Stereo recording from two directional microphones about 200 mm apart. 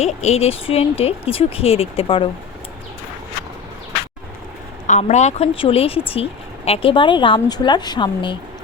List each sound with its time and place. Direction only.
0.0 s speech: 35° left (ahead or behind)
4.9 s speech: 35° left (ahead or behind)